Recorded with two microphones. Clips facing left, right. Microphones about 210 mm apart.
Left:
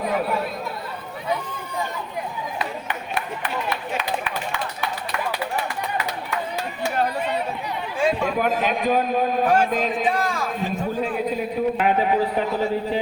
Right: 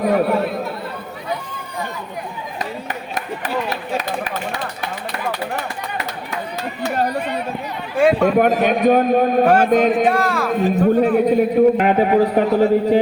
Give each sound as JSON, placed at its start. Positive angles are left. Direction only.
{"t": 0.1, "sound": "chatter", "side_deg": -60}
{"t": 3.2, "sound": "a sound", "side_deg": -40}
{"t": 7.9, "sound": "a man's voice", "side_deg": -65}